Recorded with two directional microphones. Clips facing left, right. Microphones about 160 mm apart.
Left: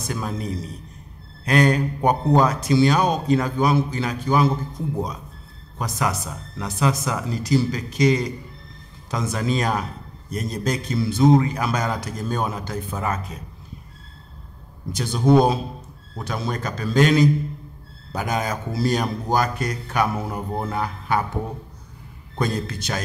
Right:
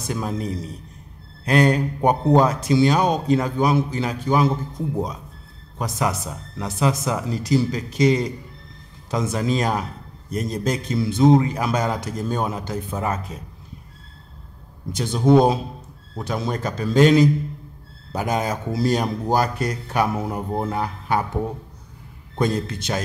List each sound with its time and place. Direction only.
0.0 s speech: 25° right (ahead or behind)
5.8 s speech: 25° right (ahead or behind)
14.9 s speech: 25° right (ahead or behind)
22.4 s speech: 25° right (ahead or behind)